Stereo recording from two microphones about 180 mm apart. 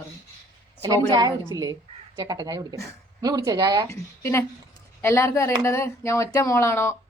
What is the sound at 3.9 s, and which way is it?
A woman's voice, 15° left (ahead or behind).